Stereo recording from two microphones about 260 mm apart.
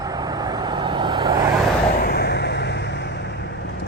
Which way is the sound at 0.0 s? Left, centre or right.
Centre.